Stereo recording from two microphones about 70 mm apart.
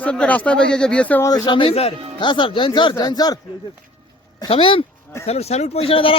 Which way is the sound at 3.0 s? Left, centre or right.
Left.